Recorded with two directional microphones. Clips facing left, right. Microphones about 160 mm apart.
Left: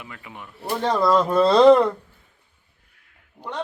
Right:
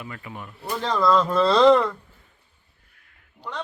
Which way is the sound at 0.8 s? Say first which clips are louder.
Left 1 dB; 25° left (ahead or behind).